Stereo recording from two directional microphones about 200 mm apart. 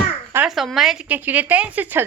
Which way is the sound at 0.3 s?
Centre (ahead or behind).